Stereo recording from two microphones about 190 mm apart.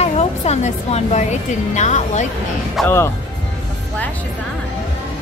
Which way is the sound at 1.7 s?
40° left (ahead or behind).